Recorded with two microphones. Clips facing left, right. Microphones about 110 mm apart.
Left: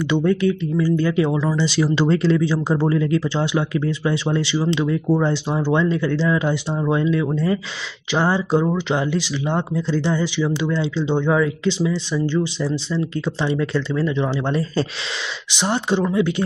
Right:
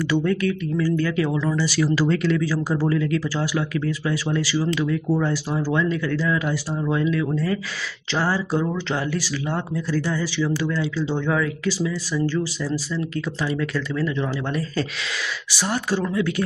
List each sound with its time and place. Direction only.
0.0 s speech: 20° left (ahead or behind)